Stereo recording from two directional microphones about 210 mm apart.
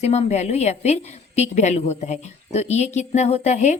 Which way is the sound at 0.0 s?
30° left (ahead or behind).